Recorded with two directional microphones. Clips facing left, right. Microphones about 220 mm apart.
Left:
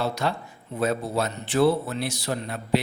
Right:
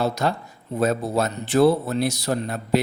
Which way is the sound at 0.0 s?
40° right (ahead or behind).